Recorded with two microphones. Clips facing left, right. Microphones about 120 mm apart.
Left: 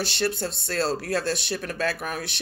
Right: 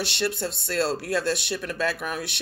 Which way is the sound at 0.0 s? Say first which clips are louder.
Left 1 dB; 35° left (ahead or behind).